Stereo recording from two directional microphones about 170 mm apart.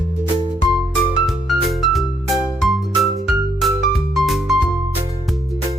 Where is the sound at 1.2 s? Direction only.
Centre (ahead or behind).